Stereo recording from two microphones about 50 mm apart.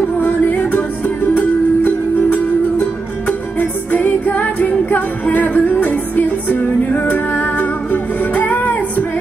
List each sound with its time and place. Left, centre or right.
0.2 s music: left